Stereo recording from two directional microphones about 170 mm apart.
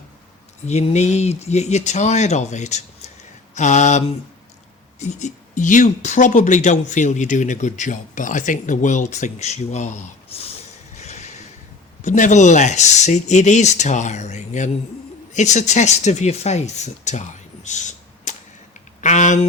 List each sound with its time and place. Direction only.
0.6 s speech: 40° left (ahead or behind)
10.9 s a sound: 40° left (ahead or behind)
12.0 s speech: 45° left (ahead or behind)